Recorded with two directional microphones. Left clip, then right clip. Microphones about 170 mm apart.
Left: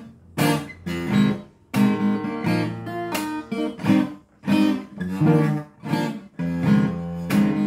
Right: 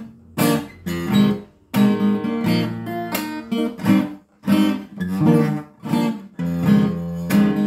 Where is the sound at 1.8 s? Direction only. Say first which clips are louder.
Right 3 dB; 25° right (ahead or behind).